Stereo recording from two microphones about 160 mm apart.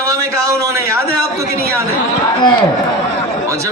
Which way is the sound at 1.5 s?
75° right (ahead or behind).